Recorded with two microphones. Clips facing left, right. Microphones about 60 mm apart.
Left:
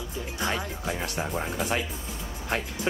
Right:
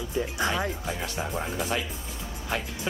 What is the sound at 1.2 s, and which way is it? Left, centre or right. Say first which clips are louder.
Speech: even; centre.